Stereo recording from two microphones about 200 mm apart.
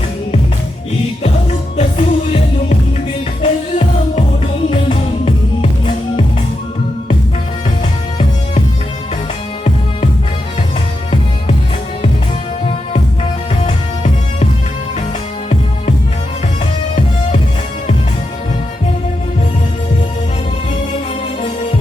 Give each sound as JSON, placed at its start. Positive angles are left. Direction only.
{"t": 1.7, "sound": "music", "side_deg": 35}
{"t": 13.7, "sound": "music", "side_deg": 30}